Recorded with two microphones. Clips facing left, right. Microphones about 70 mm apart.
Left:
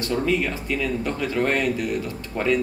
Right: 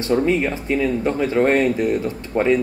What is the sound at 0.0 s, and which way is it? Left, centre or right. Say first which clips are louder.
Speech: right 5 dB; right.